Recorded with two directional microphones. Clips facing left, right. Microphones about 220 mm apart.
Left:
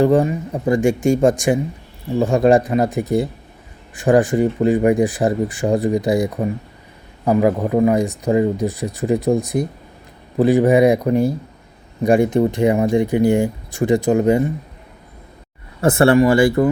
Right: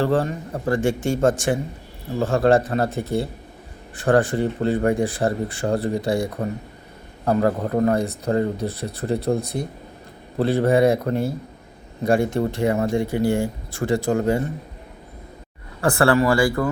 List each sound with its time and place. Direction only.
0.0 s speech: 10° left (ahead or behind)
15.8 s speech: 20° left (ahead or behind)